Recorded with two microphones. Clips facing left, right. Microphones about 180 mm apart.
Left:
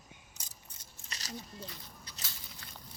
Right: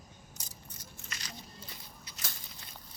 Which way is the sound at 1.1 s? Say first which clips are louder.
Left 1 dB; 40° left (ahead or behind).